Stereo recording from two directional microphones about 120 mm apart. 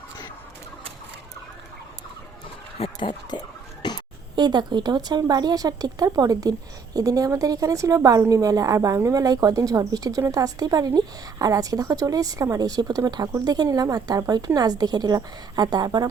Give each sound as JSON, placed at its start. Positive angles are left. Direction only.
{"t": 3.0, "sound": "speech", "side_deg": 40}
{"t": 3.8, "sound": "a sound", "side_deg": 40}
{"t": 4.4, "sound": "a woman's voice", "side_deg": -35}